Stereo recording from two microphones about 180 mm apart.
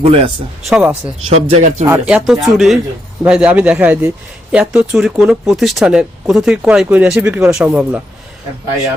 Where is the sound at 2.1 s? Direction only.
Centre (ahead or behind).